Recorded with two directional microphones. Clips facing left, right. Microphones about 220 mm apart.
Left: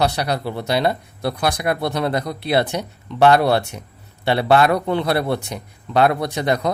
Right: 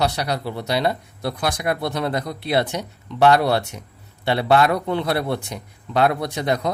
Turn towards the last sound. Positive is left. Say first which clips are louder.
# left 2 dB
turn(degrees=70)  # may be behind; listen again after turning